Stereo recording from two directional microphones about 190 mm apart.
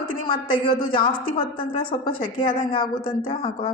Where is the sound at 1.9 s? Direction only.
25° left (ahead or behind).